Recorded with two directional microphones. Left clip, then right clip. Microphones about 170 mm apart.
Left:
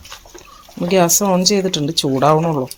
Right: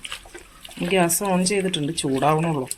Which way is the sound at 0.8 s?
30° left (ahead or behind).